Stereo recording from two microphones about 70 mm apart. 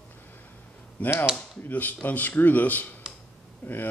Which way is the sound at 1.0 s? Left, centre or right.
Left.